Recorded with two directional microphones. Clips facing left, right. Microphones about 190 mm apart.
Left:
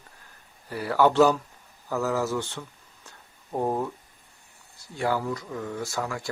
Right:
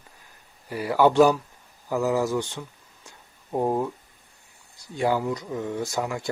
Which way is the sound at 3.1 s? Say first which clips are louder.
Right 3 dB; 10° right (ahead or behind).